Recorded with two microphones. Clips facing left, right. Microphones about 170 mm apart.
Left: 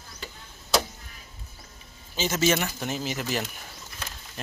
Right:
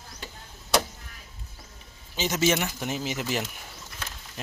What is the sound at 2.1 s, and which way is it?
Speech, 15° right (ahead or behind).